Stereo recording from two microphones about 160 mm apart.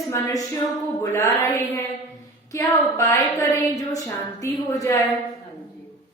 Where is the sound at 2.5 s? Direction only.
20° left (ahead or behind).